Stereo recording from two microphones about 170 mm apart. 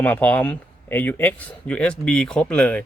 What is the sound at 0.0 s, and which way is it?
A man's voice, 10° left (ahead or behind).